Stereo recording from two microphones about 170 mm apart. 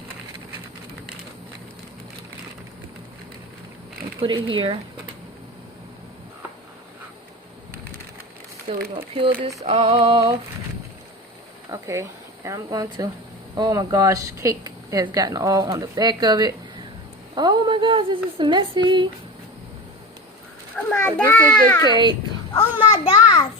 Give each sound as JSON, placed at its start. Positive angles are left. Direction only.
{"t": 4.2, "sound": "a sound", "side_deg": -30}
{"t": 8.7, "sound": "speech", "side_deg": -30}
{"t": 9.6, "sound": "a sound", "side_deg": -35}
{"t": 11.7, "sound": "speech", "side_deg": -20}
{"t": 20.7, "sound": "a child's voice", "side_deg": 10}
{"t": 21.8, "sound": "speech", "side_deg": -25}
{"t": 22.5, "sound": "a child's voice", "side_deg": 30}